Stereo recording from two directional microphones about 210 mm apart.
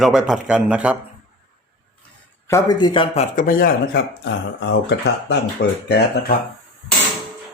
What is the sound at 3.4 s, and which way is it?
Speech, 40° left (ahead or behind).